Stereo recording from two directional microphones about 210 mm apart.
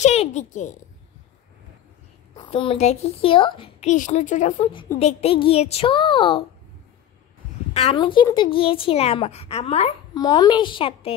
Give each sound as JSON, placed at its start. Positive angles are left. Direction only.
{"t": 0.0, "sound": "a child's voice", "side_deg": 30}
{"t": 2.3, "sound": "a woman's voice", "side_deg": 25}
{"t": 3.9, "sound": "a woman's voice", "side_deg": 35}
{"t": 7.7, "sound": "a woman's voice", "side_deg": 25}